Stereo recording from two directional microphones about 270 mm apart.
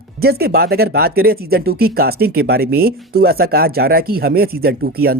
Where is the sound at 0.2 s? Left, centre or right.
Right.